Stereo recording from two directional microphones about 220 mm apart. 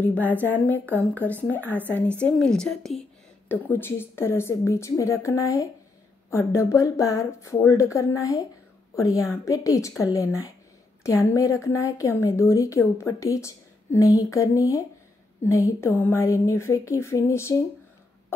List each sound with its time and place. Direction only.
0.0 s a woman's voice: 10° left (ahead or behind)